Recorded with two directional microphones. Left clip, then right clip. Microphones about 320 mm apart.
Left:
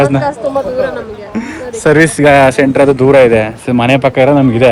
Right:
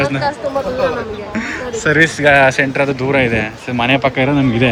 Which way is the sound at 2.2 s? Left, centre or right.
Centre.